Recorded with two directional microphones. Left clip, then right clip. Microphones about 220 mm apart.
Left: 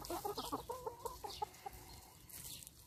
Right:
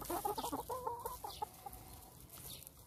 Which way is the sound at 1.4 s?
35° left (ahead or behind).